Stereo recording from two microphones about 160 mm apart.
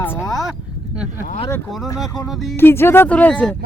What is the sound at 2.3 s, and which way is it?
Speech, centre (ahead or behind).